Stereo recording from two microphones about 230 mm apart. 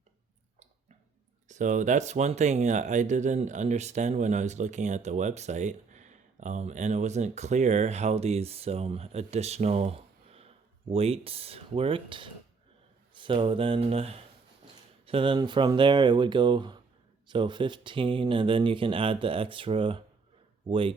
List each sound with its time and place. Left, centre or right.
1.5 s speech: right